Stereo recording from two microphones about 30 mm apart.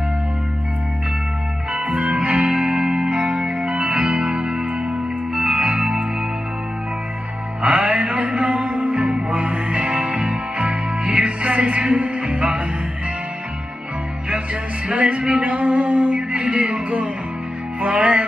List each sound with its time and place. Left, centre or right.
1.8 s music: right
7.6 s music: right
15.0 s a sound: right
17.7 s music: right